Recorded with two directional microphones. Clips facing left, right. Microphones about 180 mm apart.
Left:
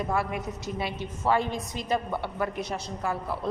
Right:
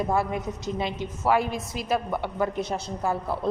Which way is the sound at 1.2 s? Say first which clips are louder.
Right 2 dB; 10° right (ahead or behind).